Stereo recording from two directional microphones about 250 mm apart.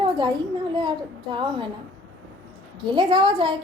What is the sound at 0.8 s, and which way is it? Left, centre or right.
Speech, centre.